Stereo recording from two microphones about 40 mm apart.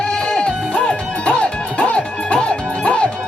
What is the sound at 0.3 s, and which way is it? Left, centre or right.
Music, centre.